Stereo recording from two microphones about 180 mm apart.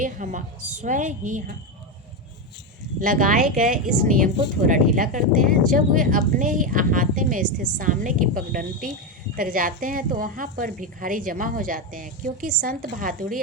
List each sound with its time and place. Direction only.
0.0 s speech: 45° right (ahead or behind)
3.0 s speech: 50° right (ahead or behind)